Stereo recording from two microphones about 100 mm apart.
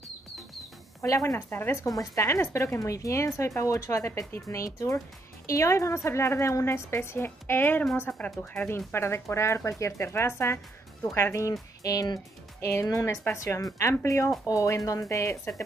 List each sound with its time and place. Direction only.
1.0 s a woman's voice: 30° left (ahead or behind)